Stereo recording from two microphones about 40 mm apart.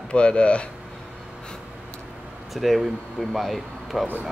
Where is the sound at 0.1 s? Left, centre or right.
Left.